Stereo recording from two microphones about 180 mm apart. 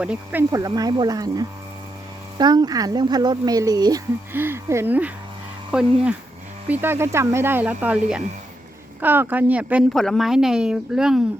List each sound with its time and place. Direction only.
0.0 s speech: 5° right (ahead or behind)
0.8 s a woman's voice: 20° right (ahead or behind); by 11.2 s 5° right (ahead or behind)